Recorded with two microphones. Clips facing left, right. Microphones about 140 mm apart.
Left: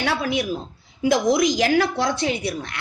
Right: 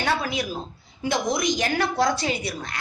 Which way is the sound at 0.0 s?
70° left (ahead or behind).